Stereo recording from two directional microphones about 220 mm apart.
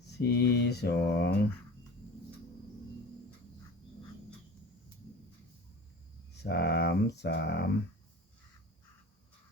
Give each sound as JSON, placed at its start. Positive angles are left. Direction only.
{"t": 0.2, "sound": "speech", "side_deg": 50}
{"t": 6.4, "sound": "speech", "side_deg": 50}